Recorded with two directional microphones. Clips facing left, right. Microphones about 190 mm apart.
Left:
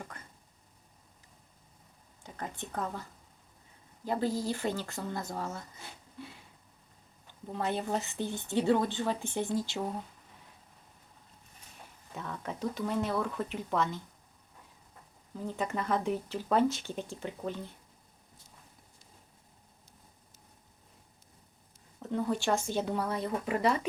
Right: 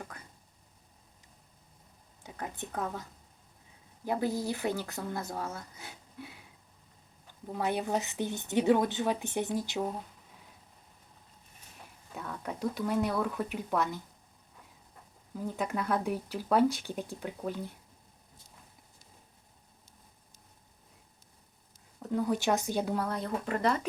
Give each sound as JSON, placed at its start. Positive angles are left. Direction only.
{"t": 2.2, "sound": "speech", "side_deg": -10}
{"t": 4.0, "sound": "a woman's voice", "side_deg": -15}
{"t": 7.4, "sound": "a woman's voice", "side_deg": -5}
{"t": 12.1, "sound": "speech", "side_deg": 0}
{"t": 15.4, "sound": "a woman's voice", "side_deg": -5}
{"t": 22.0, "sound": "speech", "side_deg": -5}
{"t": 22.5, "sound": "a woman's voice", "side_deg": -15}
{"t": 23.0, "sound": "speech", "side_deg": 5}